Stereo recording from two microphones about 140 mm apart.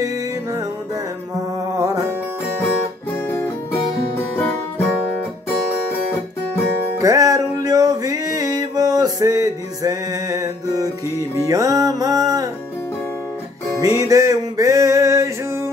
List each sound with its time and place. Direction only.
1.8 s music: 25° right (ahead or behind)
7.0 s music: 25° right (ahead or behind)
7.6 s a sound: 25° right (ahead or behind)
13.7 s music: 25° right (ahead or behind)